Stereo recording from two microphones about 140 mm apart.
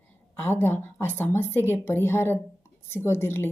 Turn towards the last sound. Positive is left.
turn(degrees=15)  # may be behind; listen again after turning